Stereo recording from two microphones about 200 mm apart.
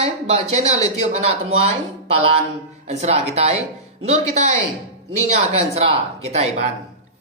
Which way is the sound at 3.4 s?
30° right (ahead or behind).